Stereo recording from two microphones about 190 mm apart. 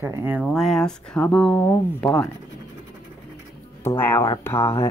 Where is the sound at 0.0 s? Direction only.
10° right (ahead or behind); by 2.2 s 10° left (ahead or behind).